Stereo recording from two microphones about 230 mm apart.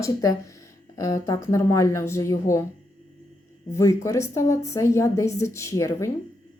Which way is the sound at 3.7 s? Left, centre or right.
Centre.